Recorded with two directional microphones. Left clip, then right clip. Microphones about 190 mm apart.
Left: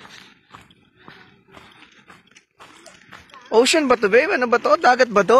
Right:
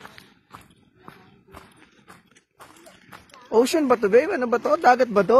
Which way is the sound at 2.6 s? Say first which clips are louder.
Left 3 dB; centre (ahead or behind).